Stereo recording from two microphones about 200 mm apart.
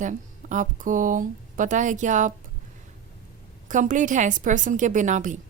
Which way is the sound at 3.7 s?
40° right (ahead or behind).